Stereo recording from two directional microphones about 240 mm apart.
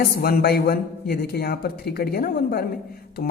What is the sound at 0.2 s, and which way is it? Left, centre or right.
Speech, left.